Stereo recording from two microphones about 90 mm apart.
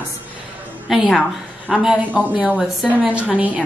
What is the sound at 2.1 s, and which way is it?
Speech, 15° right (ahead or behind).